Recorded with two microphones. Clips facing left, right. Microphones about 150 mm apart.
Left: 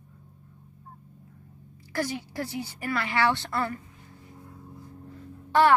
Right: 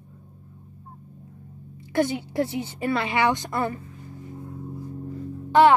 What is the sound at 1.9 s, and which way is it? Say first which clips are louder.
Speech: right 7 dB; 25° right (ahead or behind).